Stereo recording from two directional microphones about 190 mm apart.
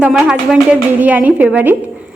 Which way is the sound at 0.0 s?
5° right (ahead or behind).